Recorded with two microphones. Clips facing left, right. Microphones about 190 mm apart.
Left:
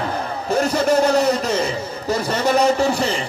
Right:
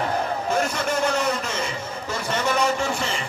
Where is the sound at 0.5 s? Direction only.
35° left (ahead or behind).